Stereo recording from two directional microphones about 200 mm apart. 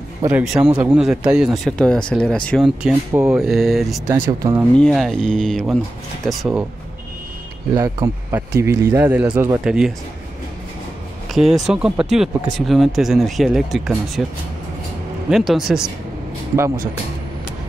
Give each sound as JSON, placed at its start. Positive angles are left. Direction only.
{"t": 0.7, "sound": "speech", "side_deg": -5}
{"t": 3.1, "sound": "speech", "side_deg": -15}
{"t": 3.3, "sound": "speech", "side_deg": 0}
{"t": 4.1, "sound": "speech", "side_deg": -15}
{"t": 4.7, "sound": "speech", "side_deg": 0}
{"t": 7.7, "sound": "speech", "side_deg": -20}
{"t": 11.3, "sound": "speech", "side_deg": 0}
{"t": 15.2, "sound": "speech", "side_deg": 0}
{"t": 16.5, "sound": "speech", "side_deg": -15}